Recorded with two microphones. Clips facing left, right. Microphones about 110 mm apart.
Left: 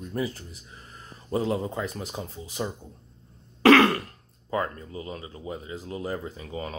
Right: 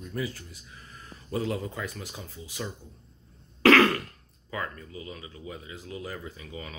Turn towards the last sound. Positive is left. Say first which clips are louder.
# left 6 dB
turn(degrees=35)  # may be behind; listen again after turning